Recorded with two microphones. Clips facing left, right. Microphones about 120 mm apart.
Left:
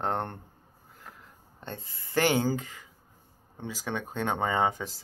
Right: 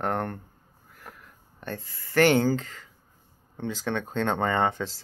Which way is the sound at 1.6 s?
20° left (ahead or behind).